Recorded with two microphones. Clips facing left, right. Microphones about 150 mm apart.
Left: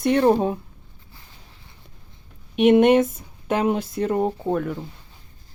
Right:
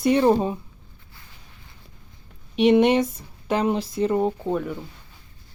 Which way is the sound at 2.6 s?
Centre (ahead or behind).